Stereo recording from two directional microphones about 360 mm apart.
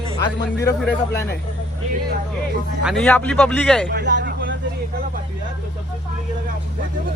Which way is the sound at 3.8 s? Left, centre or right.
Right.